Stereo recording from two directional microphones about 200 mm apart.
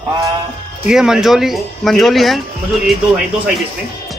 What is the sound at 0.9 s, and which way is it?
Speech, 5° right (ahead or behind).